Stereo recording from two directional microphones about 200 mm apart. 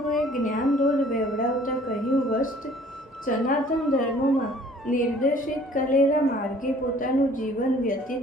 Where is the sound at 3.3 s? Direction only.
40° left (ahead or behind).